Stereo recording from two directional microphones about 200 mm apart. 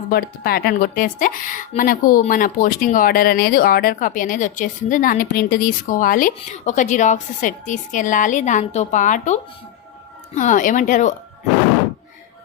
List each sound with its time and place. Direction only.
0.1 s a woman's voice: 50° left (ahead or behind)